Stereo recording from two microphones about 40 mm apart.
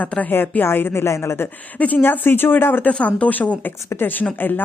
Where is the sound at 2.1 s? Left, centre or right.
Left.